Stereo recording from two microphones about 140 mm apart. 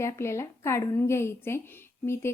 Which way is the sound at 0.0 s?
20° left (ahead or behind).